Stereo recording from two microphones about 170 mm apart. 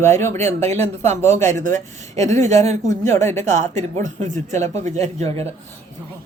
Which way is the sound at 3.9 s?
45° right (ahead or behind).